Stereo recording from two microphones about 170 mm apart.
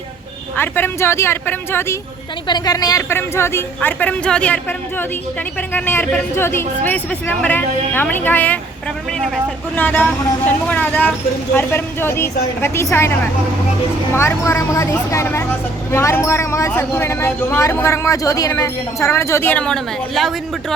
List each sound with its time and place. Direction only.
0.5 s speech: 10° left (ahead or behind)